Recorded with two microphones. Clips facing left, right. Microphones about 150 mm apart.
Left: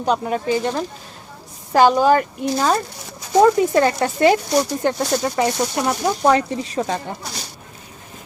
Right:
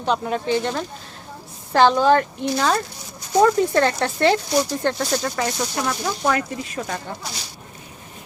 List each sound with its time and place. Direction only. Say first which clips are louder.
0.0 s speech: left 2 dB; 5° left (ahead or behind); by 7.0 s 30° left (ahead or behind)